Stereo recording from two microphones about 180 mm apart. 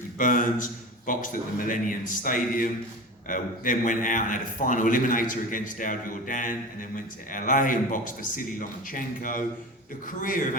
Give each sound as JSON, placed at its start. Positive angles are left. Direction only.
{"t": 0.2, "sound": "a man's voice", "side_deg": 45}